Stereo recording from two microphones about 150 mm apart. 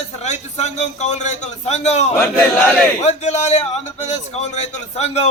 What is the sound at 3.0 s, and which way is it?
A man's voice, 50° left (ahead or behind).